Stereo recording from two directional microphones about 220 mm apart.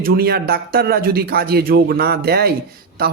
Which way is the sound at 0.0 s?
45° right (ahead or behind).